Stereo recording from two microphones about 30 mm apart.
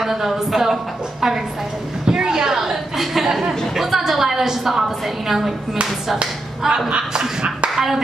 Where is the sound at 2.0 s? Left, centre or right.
Right.